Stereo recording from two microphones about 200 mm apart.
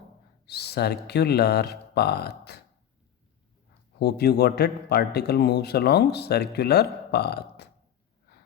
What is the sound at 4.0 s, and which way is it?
A man's voice, 55° left (ahead or behind).